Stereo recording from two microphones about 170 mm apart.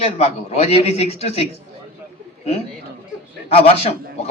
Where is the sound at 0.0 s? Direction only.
40° left (ahead or behind).